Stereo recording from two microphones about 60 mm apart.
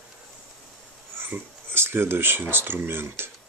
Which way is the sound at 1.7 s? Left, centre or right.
Right.